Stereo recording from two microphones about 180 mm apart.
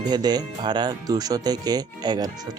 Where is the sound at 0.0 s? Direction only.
25° right (ahead or behind).